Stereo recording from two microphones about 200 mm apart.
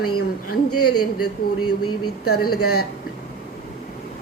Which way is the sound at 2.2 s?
90° left.